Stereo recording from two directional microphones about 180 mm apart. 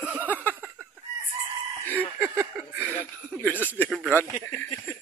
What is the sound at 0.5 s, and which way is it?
Chicken, 10° right (ahead or behind).